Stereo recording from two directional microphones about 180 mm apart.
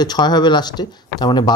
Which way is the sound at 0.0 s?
25° left (ahead or behind).